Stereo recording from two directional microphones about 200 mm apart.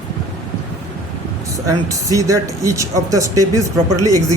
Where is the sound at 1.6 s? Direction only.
15° right (ahead or behind).